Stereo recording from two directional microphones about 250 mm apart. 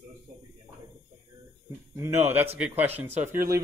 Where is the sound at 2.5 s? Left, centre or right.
Centre.